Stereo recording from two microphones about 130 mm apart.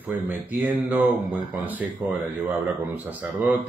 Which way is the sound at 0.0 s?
15° right (ahead or behind).